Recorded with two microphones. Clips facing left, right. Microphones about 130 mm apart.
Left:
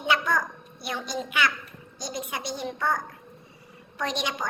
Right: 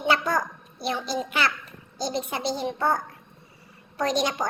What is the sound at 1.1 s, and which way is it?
A woman's voice, 35° right (ahead or behind).